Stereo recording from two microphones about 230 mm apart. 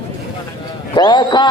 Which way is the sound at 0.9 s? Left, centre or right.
Centre.